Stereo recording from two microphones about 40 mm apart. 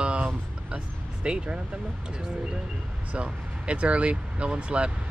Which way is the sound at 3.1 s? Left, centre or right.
Right.